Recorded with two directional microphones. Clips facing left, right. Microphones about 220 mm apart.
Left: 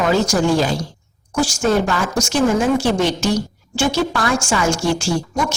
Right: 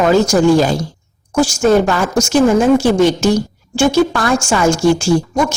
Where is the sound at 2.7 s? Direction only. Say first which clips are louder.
Right 6 dB; 45° right (ahead or behind).